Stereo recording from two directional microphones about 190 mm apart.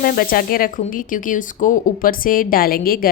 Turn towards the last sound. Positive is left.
turn(degrees=50)  # may be behind; listen again after turning